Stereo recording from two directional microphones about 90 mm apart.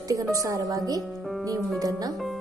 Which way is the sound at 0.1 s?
40° right (ahead or behind).